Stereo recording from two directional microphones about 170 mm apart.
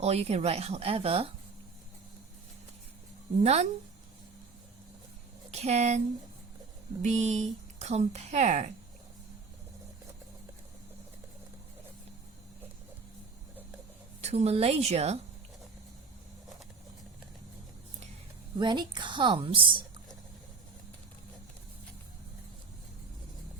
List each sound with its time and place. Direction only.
0.0 s speech: 40° right (ahead or behind)
3.4 s speech: 40° right (ahead or behind)
5.5 s speech: 40° right (ahead or behind)
7.0 s a woman's voice: 40° right (ahead or behind)
14.2 s speech: 40° right (ahead or behind)
18.6 s a woman's voice: 25° right (ahead or behind)